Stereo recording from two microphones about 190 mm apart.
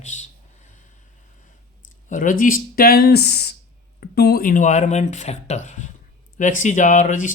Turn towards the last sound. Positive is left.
turn(degrees=40)  # may be behind; listen again after turning